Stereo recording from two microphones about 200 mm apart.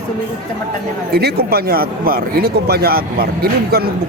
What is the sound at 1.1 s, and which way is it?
Speech, 50° right (ahead or behind).